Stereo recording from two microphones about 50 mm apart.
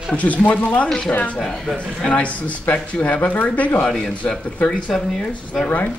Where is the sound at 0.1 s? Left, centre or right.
Left.